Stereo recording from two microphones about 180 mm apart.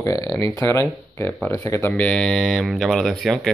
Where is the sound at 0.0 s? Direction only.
20° left (ahead or behind).